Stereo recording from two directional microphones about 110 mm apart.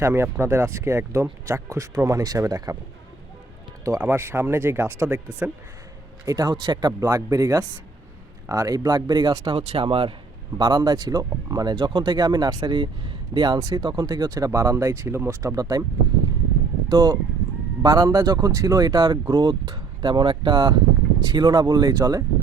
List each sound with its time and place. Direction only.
0.0 s speech: 25° right (ahead or behind)
4.0 s speech: 20° right (ahead or behind)
6.2 s speech: 35° right (ahead or behind); by 10.2 s 55° right (ahead or behind)
10.6 s speech: 40° right (ahead or behind)
16.9 s speech: 40° right (ahead or behind)